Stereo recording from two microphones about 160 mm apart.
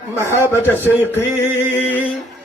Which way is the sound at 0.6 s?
15° left (ahead or behind).